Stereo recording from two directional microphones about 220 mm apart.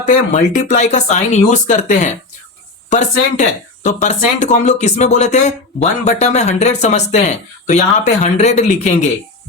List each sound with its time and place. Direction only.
0.0 s speech: 30° left (ahead or behind)